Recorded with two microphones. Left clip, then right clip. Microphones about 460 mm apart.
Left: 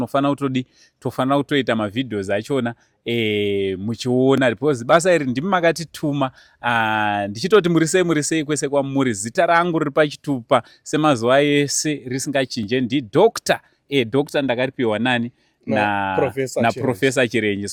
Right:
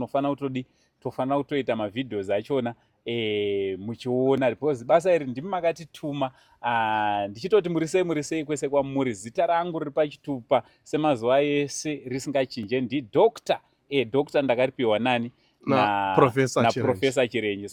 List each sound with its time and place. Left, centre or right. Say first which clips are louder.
0.0 s speech: left 6 dB; left
16.1 s speech: even; centre
16.8 s speech: left 4 dB; left